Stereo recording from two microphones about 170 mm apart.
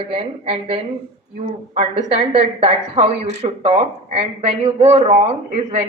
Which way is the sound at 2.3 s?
35° right (ahead or behind).